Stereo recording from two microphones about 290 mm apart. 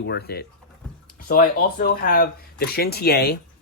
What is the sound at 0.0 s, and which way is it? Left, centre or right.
Speech, left.